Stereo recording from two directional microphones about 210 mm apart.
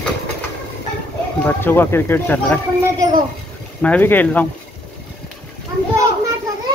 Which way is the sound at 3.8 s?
10° left (ahead or behind).